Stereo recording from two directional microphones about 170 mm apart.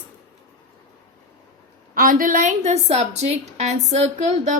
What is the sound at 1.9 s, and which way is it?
A woman's voice, 55° right (ahead or behind).